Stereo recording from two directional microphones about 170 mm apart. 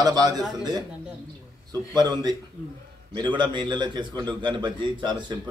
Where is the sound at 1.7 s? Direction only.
25° right (ahead or behind).